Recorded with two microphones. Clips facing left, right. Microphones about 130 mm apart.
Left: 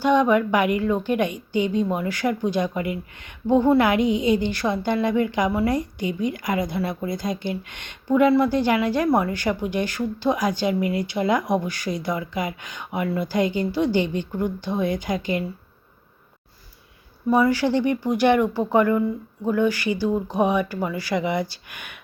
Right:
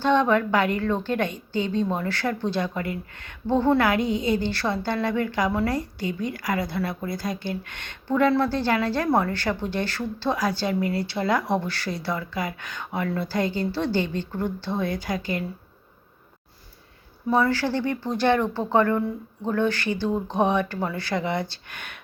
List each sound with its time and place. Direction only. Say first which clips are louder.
0.0 s a woman's voice: left 2 dB; 10° left (ahead or behind)
17.3 s a woman's voice: left 3 dB; 15° left (ahead or behind)